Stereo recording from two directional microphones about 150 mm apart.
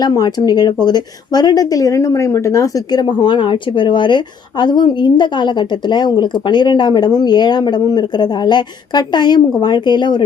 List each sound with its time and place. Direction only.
0.0 s speech: 25° left (ahead or behind)